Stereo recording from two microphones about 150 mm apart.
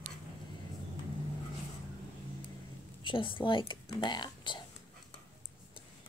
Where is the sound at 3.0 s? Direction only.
35° left (ahead or behind).